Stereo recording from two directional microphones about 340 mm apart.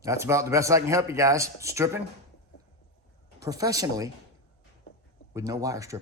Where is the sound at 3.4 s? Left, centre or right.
Centre.